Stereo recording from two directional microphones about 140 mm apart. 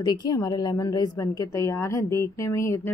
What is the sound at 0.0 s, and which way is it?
A woman's voice, 30° left (ahead or behind).